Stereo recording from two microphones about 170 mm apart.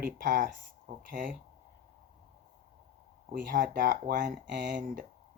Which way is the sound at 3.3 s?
55° right (ahead or behind).